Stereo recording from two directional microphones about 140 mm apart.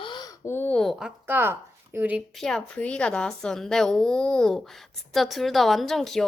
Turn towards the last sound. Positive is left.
turn(degrees=0)  # may be behind; listen again after turning